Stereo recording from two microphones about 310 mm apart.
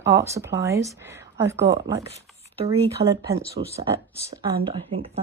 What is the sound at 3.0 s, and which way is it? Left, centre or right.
Speech, right.